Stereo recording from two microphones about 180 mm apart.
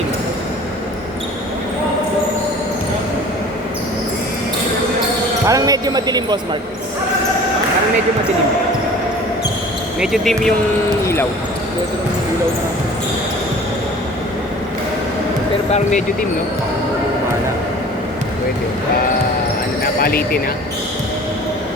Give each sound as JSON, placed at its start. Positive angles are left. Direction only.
{"t": 5.5, "sound": "music", "side_deg": -20}
{"t": 10.0, "sound": "speech", "side_deg": 0}
{"t": 11.0, "sound": "basketball bounce", "side_deg": 15}
{"t": 15.7, "sound": "speech", "side_deg": 40}
{"t": 19.8, "sound": "basketball bounce", "side_deg": 55}